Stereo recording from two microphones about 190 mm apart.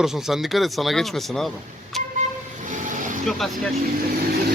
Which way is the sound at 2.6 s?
45° right (ahead or behind).